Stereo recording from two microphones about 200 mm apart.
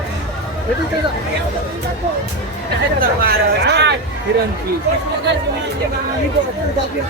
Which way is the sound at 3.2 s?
50° right (ahead or behind).